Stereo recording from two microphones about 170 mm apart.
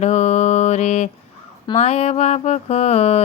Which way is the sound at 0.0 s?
40° left (ahead or behind).